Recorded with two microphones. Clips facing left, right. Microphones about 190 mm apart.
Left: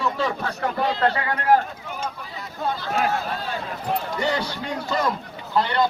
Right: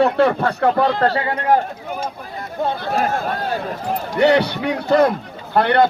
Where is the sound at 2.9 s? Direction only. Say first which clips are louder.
Right 4 dB; 45° right (ahead or behind).